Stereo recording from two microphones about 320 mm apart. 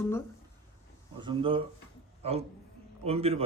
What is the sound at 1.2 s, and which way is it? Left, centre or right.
A man's voice, centre.